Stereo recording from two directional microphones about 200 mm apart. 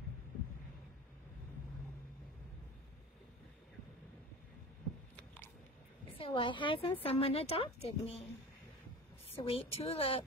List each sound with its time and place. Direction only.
6.1 s a woman's voice: 25° left (ahead or behind)
9.3 s a woman's voice: 25° left (ahead or behind)